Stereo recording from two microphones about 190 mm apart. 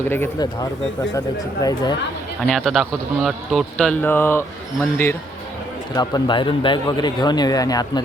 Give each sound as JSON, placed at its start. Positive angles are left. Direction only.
{"t": 0.0, "sound": "speech", "side_deg": 10}
{"t": 2.5, "sound": "speech", "side_deg": 0}